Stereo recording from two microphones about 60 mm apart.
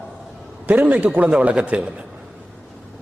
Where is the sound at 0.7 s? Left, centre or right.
Right.